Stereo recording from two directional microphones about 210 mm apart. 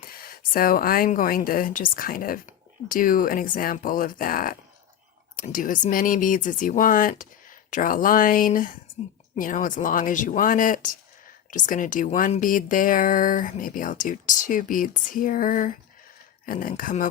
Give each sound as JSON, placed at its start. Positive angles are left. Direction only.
{"t": 0.0, "sound": "speech", "side_deg": 45}